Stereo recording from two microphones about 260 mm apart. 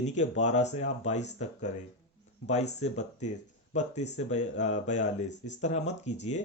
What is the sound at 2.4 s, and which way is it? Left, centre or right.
Speech, left.